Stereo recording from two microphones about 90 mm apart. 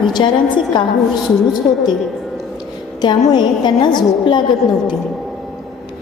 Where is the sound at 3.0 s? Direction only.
55° left (ahead or behind).